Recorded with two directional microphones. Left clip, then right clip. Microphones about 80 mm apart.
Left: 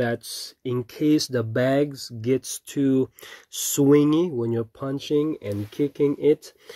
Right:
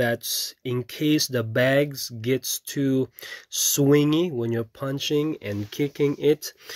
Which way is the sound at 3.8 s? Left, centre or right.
Centre.